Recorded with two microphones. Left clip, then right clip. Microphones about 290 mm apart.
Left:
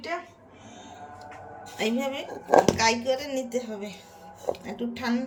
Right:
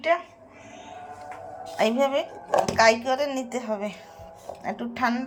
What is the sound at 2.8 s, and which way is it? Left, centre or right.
Speech, centre.